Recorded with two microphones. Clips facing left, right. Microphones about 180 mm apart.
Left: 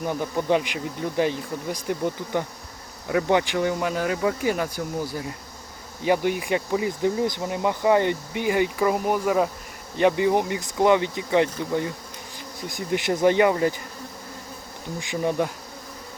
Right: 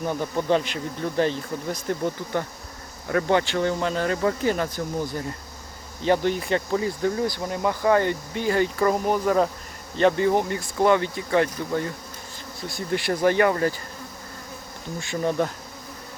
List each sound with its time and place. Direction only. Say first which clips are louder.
0.0 s speech: even; 10° left (ahead or behind)
14.9 s speech: even; 15° left (ahead or behind)